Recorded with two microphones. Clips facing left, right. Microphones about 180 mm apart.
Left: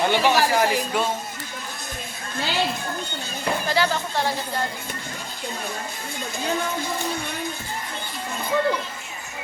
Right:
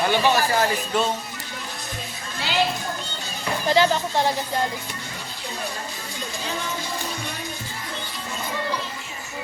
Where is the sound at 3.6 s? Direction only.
20° right (ahead or behind).